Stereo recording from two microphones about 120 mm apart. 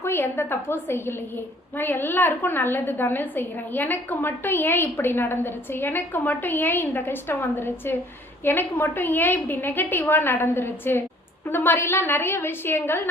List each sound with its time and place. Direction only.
0.0 s a woman's voice: 20° left (ahead or behind)